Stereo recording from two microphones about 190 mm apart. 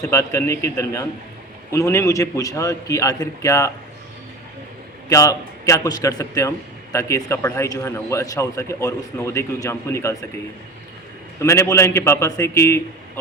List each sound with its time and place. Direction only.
0.0 s speech: 15° left (ahead or behind)
5.0 s speech: 15° left (ahead or behind)
11.3 s speech: 15° left (ahead or behind)